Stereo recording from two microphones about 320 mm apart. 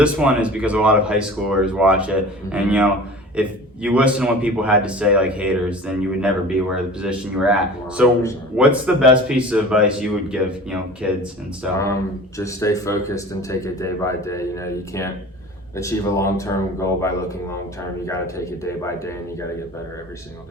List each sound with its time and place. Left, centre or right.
0.0 s speech: centre
12.4 s speech: centre